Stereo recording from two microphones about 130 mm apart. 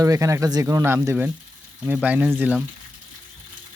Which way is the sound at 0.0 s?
25° right (ahead or behind).